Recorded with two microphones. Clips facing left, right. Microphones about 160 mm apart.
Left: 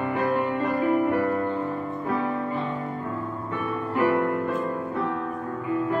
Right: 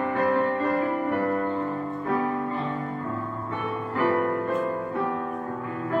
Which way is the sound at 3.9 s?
15° left (ahead or behind).